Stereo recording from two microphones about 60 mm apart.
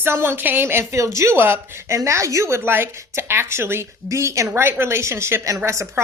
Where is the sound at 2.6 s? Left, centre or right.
Right.